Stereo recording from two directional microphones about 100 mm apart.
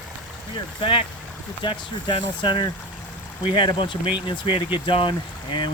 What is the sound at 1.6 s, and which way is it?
Speech, 55° left (ahead or behind).